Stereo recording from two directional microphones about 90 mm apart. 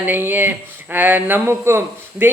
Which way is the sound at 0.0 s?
20° right (ahead or behind).